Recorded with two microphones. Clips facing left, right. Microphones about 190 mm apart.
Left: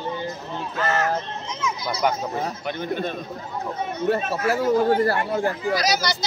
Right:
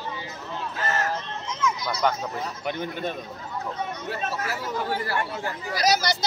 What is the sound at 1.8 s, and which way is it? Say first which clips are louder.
Speech: left 3 dB; 5° left (ahead or behind).